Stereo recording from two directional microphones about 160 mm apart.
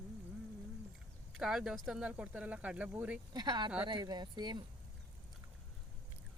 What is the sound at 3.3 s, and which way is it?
Speech, 25° right (ahead or behind).